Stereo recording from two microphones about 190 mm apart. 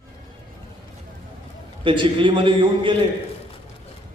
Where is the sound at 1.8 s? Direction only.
25° right (ahead or behind).